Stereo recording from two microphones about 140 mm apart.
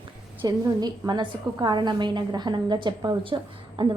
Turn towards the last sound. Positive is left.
turn(degrees=-35)  # may be behind; listen again after turning